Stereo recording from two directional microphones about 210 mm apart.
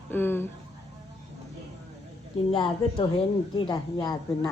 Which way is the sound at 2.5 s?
25° left (ahead or behind).